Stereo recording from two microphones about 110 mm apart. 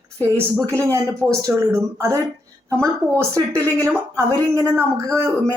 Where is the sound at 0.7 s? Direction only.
25° right (ahead or behind).